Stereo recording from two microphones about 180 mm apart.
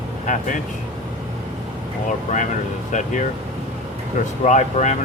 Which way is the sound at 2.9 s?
45° left (ahead or behind).